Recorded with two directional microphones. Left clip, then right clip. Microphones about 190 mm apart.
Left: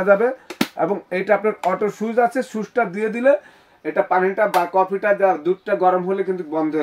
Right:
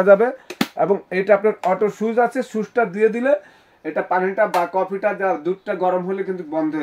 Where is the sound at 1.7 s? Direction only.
20° right (ahead or behind).